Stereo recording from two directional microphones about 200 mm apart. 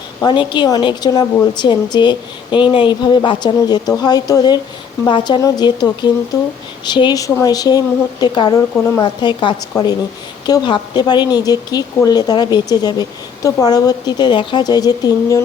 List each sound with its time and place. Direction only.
0.2 s speech: 20° left (ahead or behind)